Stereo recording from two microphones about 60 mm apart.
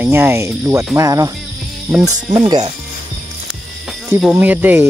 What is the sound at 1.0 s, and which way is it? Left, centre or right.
Speech, right.